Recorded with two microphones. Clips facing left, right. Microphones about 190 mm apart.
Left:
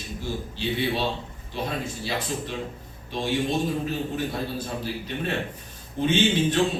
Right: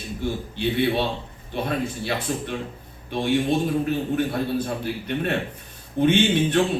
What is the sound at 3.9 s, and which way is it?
A man's voice, 60° right (ahead or behind).